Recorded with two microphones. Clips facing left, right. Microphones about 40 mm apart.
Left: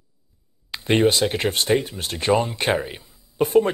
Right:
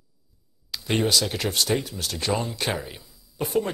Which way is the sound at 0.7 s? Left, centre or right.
Left.